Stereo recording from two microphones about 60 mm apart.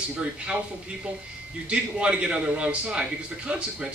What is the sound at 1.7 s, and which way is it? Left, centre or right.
A man's voice, centre.